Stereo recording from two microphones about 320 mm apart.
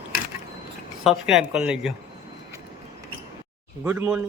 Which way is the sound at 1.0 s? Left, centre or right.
Centre.